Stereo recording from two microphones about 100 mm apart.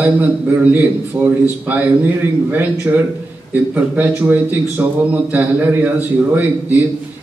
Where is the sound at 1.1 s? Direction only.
45° right (ahead or behind).